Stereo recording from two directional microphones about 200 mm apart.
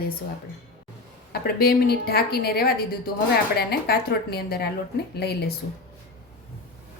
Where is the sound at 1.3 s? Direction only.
50° left (ahead or behind).